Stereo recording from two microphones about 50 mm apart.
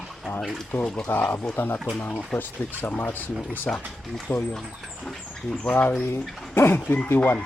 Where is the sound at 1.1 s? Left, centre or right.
Left.